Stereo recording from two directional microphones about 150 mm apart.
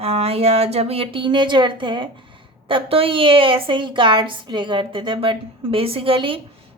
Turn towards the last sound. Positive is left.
turn(degrees=-35)  # may be behind; listen again after turning